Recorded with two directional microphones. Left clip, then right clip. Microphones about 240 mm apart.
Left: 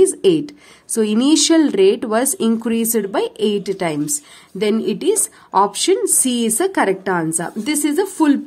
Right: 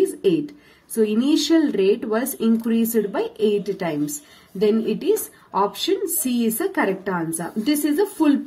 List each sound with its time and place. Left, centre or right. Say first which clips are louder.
0.9 s speech: left 4 dB; left